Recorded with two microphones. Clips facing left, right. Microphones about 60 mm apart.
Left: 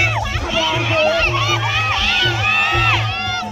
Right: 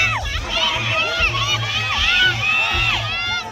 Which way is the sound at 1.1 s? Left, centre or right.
Left.